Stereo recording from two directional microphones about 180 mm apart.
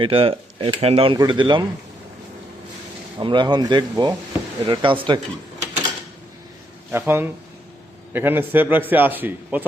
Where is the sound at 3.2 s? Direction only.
25° right (ahead or behind).